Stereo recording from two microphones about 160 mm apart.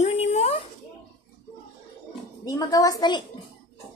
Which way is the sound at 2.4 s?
20° left (ahead or behind).